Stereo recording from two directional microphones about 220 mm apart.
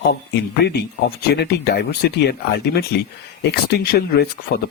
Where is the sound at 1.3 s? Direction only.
45° left (ahead or behind).